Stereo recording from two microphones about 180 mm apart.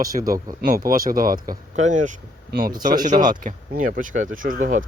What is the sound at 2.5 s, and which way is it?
Speech, 55° right (ahead or behind).